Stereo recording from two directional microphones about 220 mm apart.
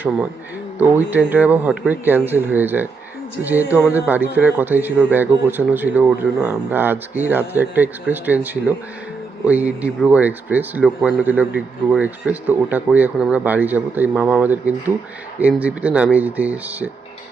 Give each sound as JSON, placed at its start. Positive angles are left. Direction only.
{"t": 0.8, "sound": "speech", "side_deg": -5}